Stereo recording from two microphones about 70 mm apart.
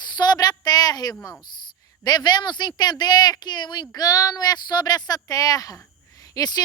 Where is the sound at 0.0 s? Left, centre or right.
Left.